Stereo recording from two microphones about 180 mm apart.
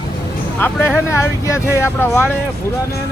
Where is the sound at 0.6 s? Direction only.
10° left (ahead or behind).